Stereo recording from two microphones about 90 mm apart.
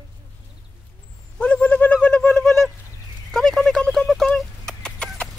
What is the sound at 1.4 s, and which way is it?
Bird, 15° left (ahead or behind).